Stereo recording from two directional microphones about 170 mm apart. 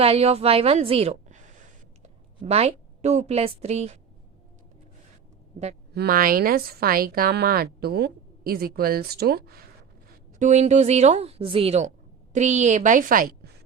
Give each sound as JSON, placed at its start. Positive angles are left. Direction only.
{"t": 0.0, "sound": "a woman's voice", "side_deg": -35}
{"t": 2.4, "sound": "a woman's voice", "side_deg": -35}
{"t": 5.9, "sound": "a woman's voice", "side_deg": -65}
{"t": 10.3, "sound": "a woman's voice", "side_deg": -45}